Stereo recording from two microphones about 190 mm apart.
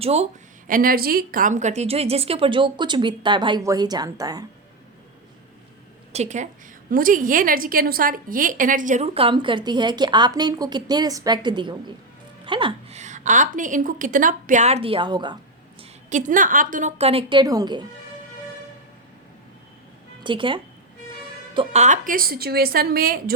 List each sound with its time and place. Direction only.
0.0 s a woman's voice: 35° right (ahead or behind)
0.7 s a woman's voice: 50° right (ahead or behind); by 4.4 s 20° right (ahead or behind)
6.1 s a woman's voice: 40° right (ahead or behind)
15.8 s a woman's voice: 40° right (ahead or behind); by 17.8 s 20° right (ahead or behind)
20.2 s a woman's voice: 25° right (ahead or behind); by 23.3 s 50° right (ahead or behind)